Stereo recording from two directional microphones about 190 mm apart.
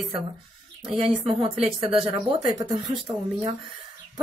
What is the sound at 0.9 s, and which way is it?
Speech, 30° right (ahead or behind).